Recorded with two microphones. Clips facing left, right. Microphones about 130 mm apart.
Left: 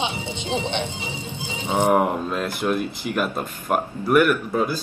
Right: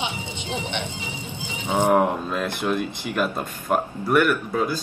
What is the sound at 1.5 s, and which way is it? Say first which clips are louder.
Speech: even; 15° left (ahead or behind).